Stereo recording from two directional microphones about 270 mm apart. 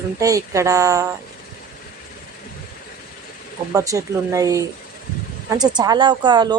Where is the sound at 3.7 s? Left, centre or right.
Centre.